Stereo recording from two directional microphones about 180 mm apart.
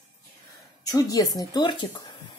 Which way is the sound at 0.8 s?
20° left (ahead or behind).